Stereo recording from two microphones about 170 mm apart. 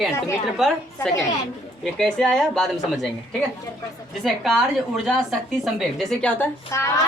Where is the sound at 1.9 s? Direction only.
5° left (ahead or behind).